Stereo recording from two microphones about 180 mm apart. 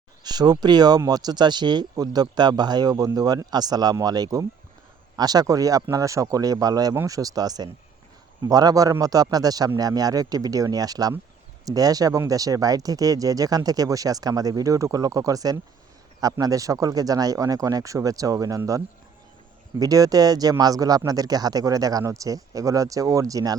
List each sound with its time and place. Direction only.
0.3 s speech: 20° right (ahead or behind)
19.8 s speech: 20° right (ahead or behind)